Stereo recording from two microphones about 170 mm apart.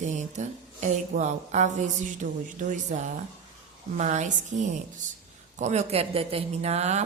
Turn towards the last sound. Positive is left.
turn(degrees=-40)  # may be behind; listen again after turning